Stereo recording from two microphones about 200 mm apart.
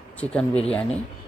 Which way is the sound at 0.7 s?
5° left (ahead or behind).